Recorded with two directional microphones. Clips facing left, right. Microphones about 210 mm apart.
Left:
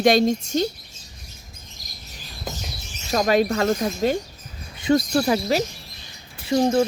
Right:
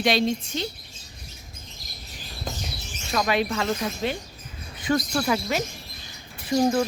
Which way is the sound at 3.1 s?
40° left (ahead or behind).